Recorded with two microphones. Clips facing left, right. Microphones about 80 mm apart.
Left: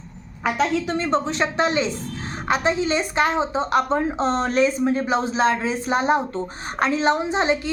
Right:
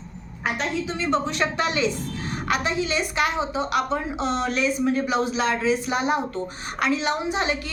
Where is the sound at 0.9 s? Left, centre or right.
Left.